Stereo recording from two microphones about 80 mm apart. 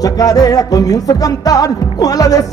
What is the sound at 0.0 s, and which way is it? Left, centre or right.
Music, left.